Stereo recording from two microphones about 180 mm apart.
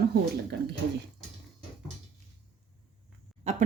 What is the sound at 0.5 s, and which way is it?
Speech, 70° right (ahead or behind).